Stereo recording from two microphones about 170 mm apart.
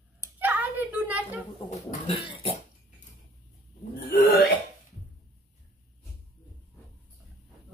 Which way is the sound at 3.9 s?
70° left (ahead or behind).